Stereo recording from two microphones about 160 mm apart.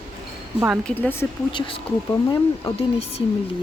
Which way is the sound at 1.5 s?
30° left (ahead or behind).